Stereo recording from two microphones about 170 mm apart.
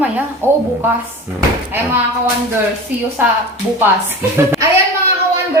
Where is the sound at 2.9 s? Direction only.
10° right (ahead or behind).